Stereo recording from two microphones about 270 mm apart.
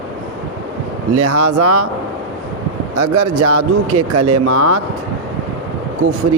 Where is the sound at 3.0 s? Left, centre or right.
Right.